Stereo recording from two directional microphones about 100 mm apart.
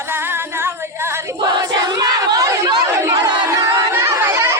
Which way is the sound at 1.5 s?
40° right (ahead or behind).